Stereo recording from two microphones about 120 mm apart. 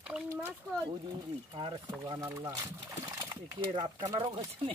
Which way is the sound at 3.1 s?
35° right (ahead or behind).